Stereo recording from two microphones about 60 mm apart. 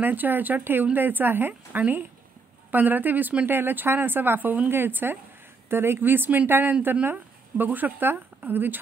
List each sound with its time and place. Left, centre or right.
0.0 s speech: right